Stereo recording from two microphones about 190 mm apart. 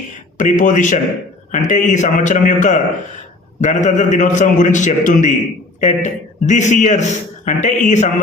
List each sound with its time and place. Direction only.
0.3 s a man's voice: 45° left (ahead or behind)